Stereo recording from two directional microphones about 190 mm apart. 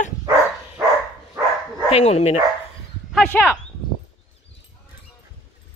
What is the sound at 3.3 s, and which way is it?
Speech, 5° left (ahead or behind).